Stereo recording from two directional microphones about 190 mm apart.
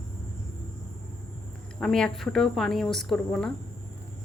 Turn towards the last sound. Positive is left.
turn(degrees=0)  # may be behind; listen again after turning